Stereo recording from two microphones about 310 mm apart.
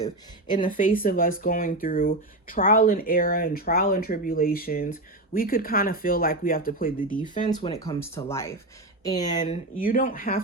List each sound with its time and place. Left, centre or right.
0.5 s speech: left
7.5 s speech: centre
9.4 s speech: left